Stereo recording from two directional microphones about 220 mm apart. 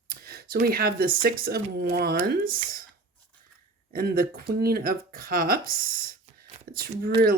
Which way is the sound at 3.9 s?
40° right (ahead or behind).